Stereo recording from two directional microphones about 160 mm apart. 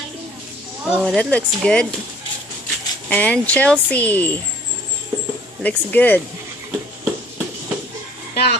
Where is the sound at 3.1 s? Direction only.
10° left (ahead or behind).